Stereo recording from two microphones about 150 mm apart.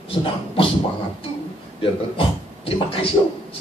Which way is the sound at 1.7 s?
35° left (ahead or behind).